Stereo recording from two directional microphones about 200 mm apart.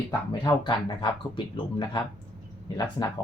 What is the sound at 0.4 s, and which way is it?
Speech, 25° left (ahead or behind).